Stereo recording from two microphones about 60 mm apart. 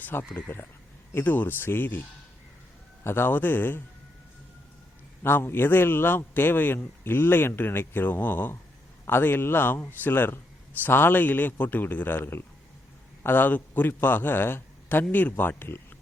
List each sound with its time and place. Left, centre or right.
0.0 s a man's voice: left
5.2 s a man's voice: left